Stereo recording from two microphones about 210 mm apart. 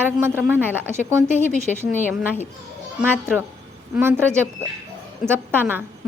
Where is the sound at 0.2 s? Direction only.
10° right (ahead or behind).